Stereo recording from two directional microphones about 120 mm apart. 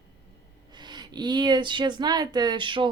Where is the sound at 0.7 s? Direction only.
35° right (ahead or behind).